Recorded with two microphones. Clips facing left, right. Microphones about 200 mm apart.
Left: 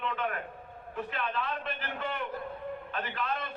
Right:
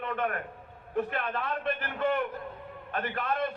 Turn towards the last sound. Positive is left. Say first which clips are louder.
# right 4 dB
turn(degrees=-50)  # may be behind; listen again after turning